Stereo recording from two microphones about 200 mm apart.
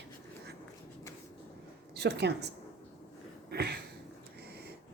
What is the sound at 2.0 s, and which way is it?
Speech, 55° right (ahead or behind).